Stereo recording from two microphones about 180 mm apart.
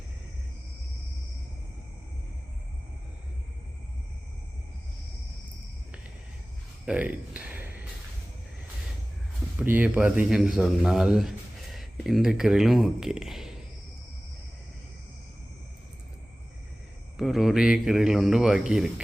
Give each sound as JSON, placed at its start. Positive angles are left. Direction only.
{"t": 6.8, "sound": "a sound", "side_deg": -10}
{"t": 9.6, "sound": "speech", "side_deg": -10}
{"t": 17.2, "sound": "speech", "side_deg": 0}